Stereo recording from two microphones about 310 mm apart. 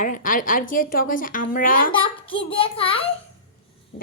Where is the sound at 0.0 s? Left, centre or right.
Left.